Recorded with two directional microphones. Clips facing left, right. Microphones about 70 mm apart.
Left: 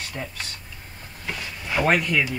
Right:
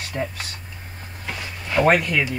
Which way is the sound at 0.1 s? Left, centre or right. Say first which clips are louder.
Right 6 dB; centre.